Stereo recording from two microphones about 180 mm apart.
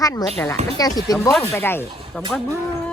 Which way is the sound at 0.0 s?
20° left (ahead or behind).